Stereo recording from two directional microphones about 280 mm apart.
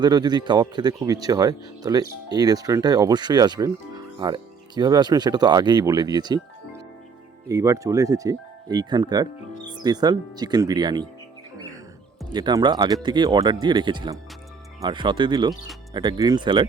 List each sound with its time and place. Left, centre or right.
0.0 s speech: centre
7.4 s speech: centre
12.3 s speech: centre